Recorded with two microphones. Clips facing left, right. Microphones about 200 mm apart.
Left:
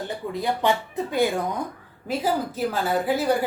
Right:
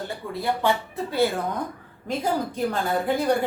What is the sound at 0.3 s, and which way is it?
Speech, 15° left (ahead or behind).